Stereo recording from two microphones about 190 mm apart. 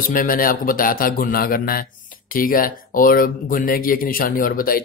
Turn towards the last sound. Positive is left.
turn(degrees=50)  # may be behind; listen again after turning